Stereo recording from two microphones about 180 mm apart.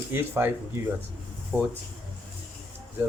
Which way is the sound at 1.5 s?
5° right (ahead or behind).